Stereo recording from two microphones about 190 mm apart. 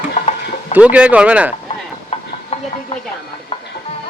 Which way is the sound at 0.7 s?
5° right (ahead or behind).